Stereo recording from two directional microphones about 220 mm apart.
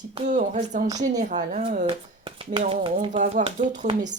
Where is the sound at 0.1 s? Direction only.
30° right (ahead or behind).